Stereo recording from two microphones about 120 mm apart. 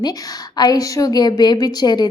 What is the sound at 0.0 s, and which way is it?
A woman's voice, 30° left (ahead or behind).